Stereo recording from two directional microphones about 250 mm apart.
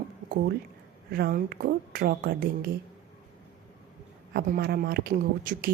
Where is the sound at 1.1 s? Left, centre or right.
Right.